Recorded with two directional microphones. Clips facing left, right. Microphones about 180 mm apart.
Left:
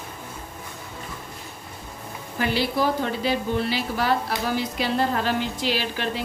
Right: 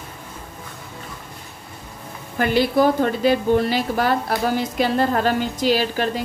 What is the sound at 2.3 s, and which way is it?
A woman's voice, 50° right (ahead or behind).